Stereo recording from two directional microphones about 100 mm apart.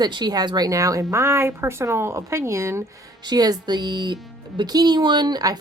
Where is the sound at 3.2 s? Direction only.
40° right (ahead or behind).